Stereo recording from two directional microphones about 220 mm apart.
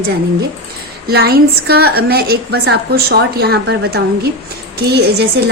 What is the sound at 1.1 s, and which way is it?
A woman's voice, 45° right (ahead or behind).